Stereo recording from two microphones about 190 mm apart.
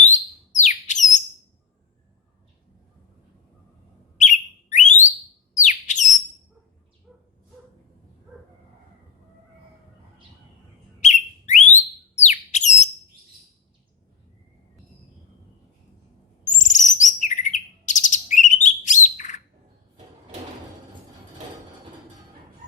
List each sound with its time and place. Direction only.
0.1 s bird: 40° left (ahead or behind)
4.2 s bird: 40° left (ahead or behind)
7.1 s bow-wow: centre (ahead or behind)
11.0 s bird: 40° left (ahead or behind)
16.4 s chirp: 40° left (ahead or behind)